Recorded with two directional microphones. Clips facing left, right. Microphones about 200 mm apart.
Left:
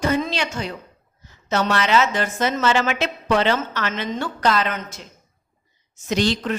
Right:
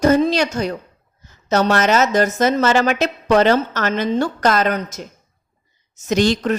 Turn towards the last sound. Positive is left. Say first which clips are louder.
# right 5 dB
turn(degrees=-45)  # may be behind; listen again after turning